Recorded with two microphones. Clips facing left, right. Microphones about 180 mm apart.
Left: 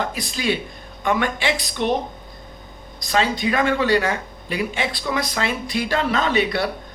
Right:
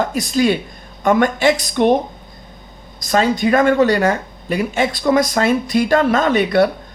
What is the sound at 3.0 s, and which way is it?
Speech, 45° right (ahead or behind).